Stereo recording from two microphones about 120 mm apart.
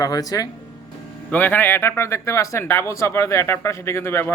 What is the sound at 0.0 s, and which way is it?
Speech, 30° left (ahead or behind).